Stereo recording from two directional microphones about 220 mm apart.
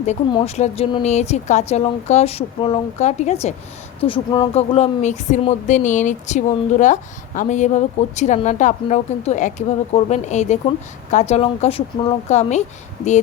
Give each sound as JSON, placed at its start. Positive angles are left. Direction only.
{"t": 0.0, "sound": "speech", "side_deg": 30}